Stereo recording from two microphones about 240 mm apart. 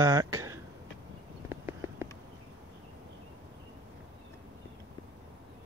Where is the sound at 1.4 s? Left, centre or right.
Centre.